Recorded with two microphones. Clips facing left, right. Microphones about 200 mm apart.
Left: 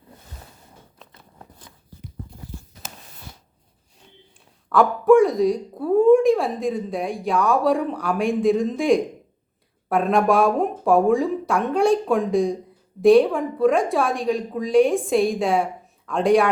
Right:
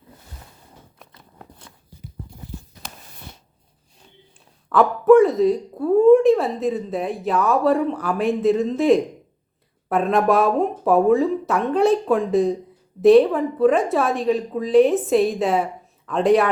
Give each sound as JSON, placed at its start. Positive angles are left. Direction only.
{"t": 4.7, "sound": "a woman's voice", "side_deg": 0}